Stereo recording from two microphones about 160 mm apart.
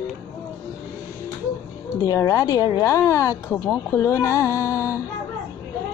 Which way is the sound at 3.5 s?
10° left (ahead or behind).